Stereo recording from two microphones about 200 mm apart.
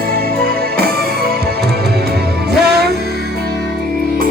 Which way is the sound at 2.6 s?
55° right (ahead or behind).